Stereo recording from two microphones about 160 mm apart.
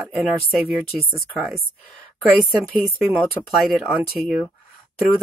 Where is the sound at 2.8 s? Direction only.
5° right (ahead or behind).